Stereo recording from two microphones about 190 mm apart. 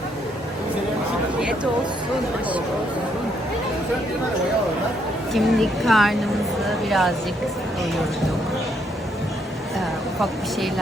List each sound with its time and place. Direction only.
5.3 s a woman's voice: centre (ahead or behind)